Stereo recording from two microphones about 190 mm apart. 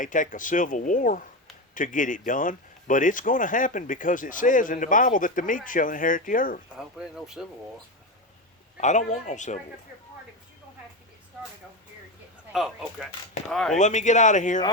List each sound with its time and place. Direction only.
0.0 s speech: 40° left (ahead or behind)
6.7 s speech: 5° right (ahead or behind)
8.8 s speech: 40° left (ahead or behind)
12.5 s speech: centre (ahead or behind)
13.7 s speech: 40° left (ahead or behind)